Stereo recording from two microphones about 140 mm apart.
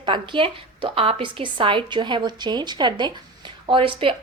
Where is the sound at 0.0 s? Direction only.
35° right (ahead or behind).